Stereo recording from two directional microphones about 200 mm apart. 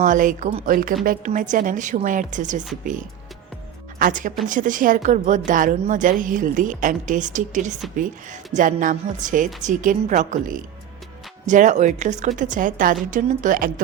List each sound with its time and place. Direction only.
0.0 s a woman's voice: 40° right (ahead or behind)
3.9 s a woman's voice: 40° right (ahead or behind)